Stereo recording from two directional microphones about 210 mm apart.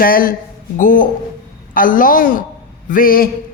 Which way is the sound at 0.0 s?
45° left (ahead or behind).